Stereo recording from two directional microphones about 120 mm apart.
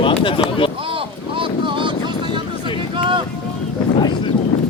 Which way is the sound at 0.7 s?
45° right (ahead or behind).